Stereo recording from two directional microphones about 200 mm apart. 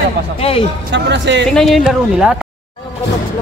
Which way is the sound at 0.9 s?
60° right (ahead or behind).